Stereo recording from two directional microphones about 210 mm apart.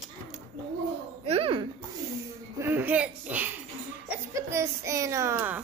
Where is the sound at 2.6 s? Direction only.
10° right (ahead or behind).